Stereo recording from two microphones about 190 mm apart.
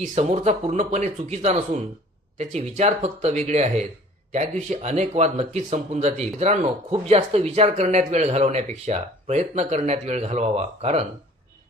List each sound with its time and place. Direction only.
0.0 s speech: 35° right (ahead or behind)